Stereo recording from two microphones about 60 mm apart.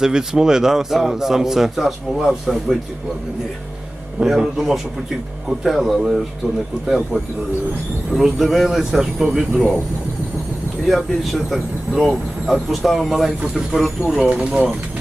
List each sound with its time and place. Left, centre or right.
0.0 s a man's voice: centre
4.4 s a man's voice: centre
10.8 s a man's voice: centre
14.1 s speech: centre